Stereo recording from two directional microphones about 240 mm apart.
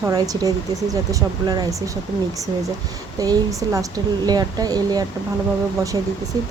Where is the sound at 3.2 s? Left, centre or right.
Centre.